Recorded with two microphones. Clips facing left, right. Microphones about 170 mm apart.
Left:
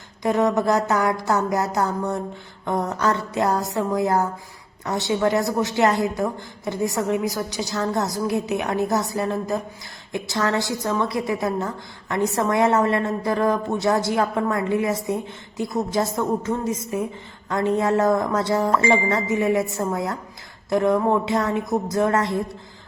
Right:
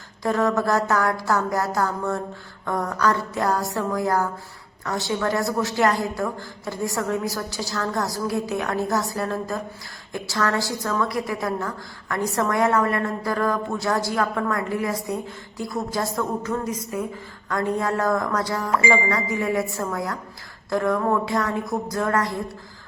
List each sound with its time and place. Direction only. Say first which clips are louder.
0.2 s a woman's voice: left 2 dB; 20° left (ahead or behind)